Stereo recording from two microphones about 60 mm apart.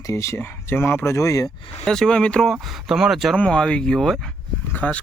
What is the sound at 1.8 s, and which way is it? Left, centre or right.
Speech, centre.